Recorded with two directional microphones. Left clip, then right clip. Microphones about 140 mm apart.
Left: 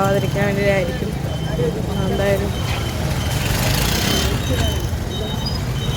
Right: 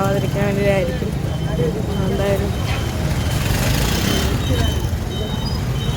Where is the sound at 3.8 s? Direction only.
65° right (ahead or behind).